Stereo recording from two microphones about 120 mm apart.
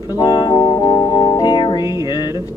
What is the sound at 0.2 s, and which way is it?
Music, 35° left (ahead or behind).